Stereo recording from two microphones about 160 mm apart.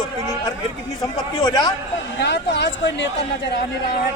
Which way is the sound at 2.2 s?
90° left.